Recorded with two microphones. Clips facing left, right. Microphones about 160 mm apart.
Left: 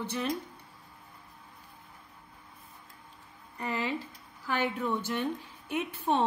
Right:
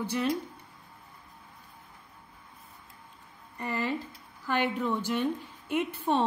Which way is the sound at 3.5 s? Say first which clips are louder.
Right 1 dB; 15° left (ahead or behind).